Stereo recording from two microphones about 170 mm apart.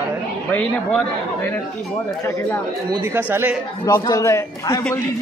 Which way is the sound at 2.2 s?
15° left (ahead or behind).